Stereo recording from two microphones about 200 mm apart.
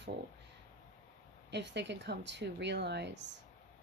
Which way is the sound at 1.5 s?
60° right (ahead or behind).